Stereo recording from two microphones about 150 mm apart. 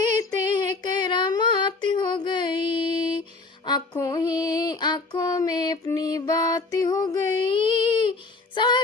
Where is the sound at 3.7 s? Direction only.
25° left (ahead or behind).